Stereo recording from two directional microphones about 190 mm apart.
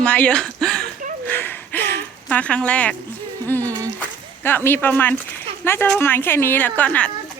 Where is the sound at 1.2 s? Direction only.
10° left (ahead or behind).